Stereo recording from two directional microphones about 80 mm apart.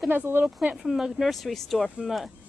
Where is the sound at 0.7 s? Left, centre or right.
Centre.